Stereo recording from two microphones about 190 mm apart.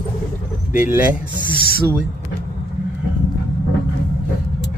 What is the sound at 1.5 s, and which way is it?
Speech, 55° left (ahead or behind).